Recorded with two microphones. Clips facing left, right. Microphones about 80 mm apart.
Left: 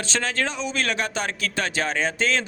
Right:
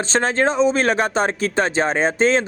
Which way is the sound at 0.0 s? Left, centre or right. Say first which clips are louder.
Right 8 dB; right.